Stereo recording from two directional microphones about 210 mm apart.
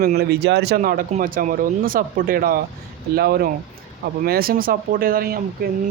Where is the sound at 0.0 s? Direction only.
50° right (ahead or behind).